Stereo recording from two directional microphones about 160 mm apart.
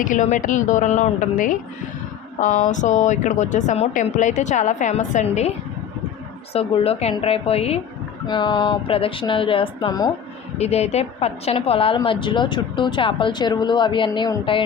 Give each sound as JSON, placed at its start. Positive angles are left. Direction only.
{"t": 0.0, "sound": "a woman's voice", "side_deg": 50}
{"t": 6.5, "sound": "a woman's voice", "side_deg": 35}
{"t": 8.3, "sound": "speech", "side_deg": 30}
{"t": 10.6, "sound": "a woman's voice", "side_deg": 40}